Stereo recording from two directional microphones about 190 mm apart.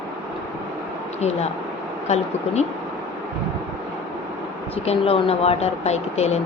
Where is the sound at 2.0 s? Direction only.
35° left (ahead or behind).